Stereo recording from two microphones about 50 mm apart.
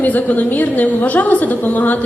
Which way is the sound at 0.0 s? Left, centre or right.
Left.